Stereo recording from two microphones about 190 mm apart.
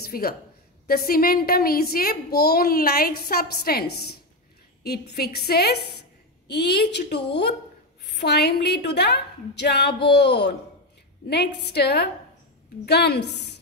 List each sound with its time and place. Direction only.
0.0 s a woman's voice: 55° left (ahead or behind)